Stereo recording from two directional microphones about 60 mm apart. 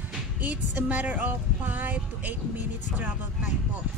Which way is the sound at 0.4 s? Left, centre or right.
Right.